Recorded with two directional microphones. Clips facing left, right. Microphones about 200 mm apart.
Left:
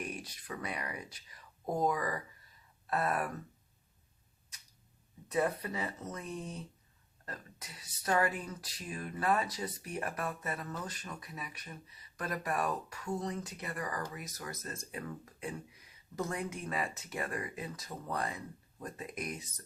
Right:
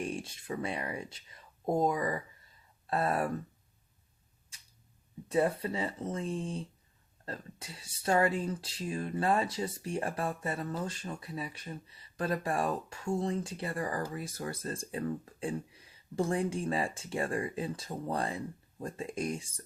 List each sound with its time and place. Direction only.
0.0 s speech: 25° right (ahead or behind)
5.3 s speech: 30° right (ahead or behind)